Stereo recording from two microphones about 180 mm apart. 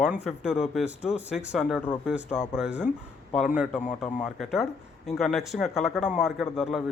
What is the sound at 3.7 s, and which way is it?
Speech, 40° left (ahead or behind).